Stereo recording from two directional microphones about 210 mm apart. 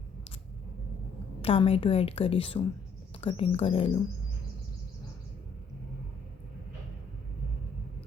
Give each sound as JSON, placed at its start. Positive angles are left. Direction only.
{"t": 1.4, "sound": "a woman's voice", "side_deg": 25}